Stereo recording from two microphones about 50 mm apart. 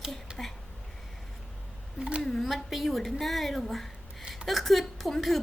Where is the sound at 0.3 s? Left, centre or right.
Centre.